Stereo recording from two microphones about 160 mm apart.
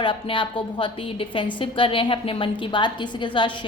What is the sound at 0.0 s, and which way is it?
A woman's voice, 30° left (ahead or behind).